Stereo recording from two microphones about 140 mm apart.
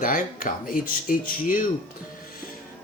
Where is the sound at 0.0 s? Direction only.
80° left.